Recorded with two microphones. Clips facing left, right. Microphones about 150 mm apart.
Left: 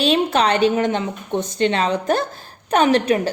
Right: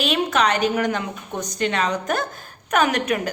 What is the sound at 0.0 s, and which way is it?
A woman's voice, 30° left (ahead or behind).